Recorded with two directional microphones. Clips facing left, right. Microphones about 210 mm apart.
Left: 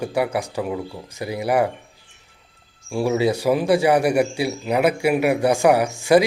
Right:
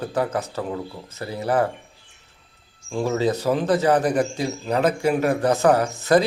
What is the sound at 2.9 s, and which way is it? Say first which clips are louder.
Speech: left 2 dB; 10° left (ahead or behind).